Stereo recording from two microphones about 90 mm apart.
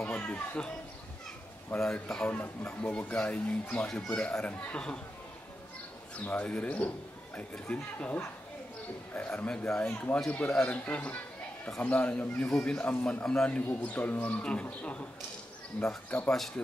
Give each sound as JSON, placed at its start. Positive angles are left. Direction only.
{"t": 0.0, "sound": "children playing", "side_deg": 15}
{"t": 1.8, "sound": "speech", "side_deg": 5}
{"t": 6.1, "sound": "speech", "side_deg": 15}
{"t": 16.3, "sound": "speech", "side_deg": 5}